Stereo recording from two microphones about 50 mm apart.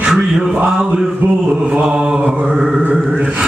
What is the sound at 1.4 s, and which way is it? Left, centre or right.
Mantra, right.